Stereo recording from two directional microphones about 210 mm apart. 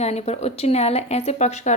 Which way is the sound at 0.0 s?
30° left (ahead or behind).